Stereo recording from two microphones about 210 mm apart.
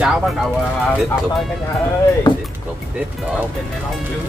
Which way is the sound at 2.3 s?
20° left (ahead or behind).